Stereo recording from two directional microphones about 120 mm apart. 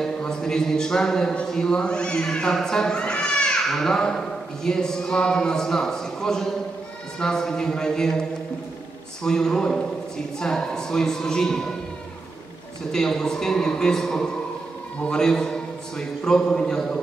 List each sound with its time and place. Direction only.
0.0 s a man's voice: 5° left (ahead or behind)
12.9 s a man's voice: 5° left (ahead or behind)